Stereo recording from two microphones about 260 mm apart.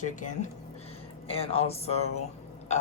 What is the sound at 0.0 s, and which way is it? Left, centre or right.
A man's voice, left.